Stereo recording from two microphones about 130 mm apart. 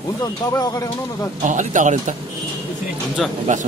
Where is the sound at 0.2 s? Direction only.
30° left (ahead or behind).